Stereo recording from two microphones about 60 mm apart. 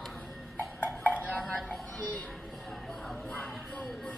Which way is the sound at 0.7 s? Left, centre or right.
Left.